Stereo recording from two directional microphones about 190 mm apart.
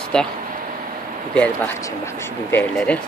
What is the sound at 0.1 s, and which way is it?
Speech, 5° left (ahead or behind).